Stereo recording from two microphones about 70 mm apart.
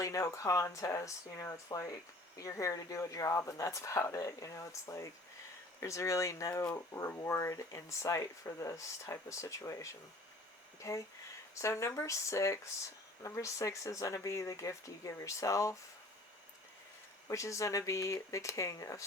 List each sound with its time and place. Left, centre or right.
0.0 s speech: left
17.2 s speech: left